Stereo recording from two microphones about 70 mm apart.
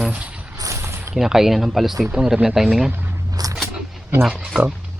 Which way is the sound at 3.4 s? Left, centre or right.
Right.